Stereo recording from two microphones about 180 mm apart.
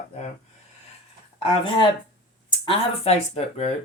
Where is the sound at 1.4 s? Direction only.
30° left (ahead or behind).